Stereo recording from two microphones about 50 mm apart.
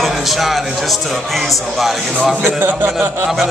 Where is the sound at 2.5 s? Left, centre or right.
Right.